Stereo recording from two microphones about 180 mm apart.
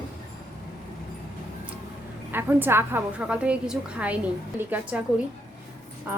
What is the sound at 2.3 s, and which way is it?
Speech, 10° right (ahead or behind).